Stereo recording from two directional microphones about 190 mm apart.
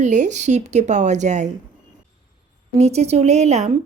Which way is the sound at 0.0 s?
40° right (ahead or behind).